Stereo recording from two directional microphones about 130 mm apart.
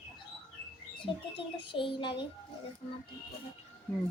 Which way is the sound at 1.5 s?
40° left (ahead or behind).